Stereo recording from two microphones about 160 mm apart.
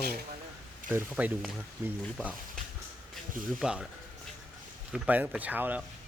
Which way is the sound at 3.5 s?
5° right (ahead or behind).